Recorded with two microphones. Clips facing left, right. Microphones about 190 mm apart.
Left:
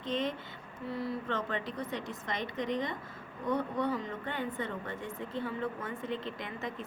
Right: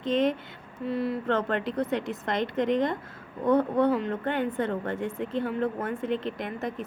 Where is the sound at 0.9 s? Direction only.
60° right (ahead or behind).